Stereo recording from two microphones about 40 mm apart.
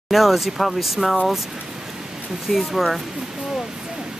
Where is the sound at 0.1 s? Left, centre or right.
Centre.